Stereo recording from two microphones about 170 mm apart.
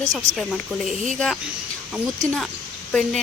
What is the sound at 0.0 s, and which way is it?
Speech, 20° right (ahead or behind).